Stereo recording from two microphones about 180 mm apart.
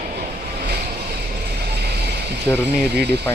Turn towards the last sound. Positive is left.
turn(degrees=-65)  # may be behind; listen again after turning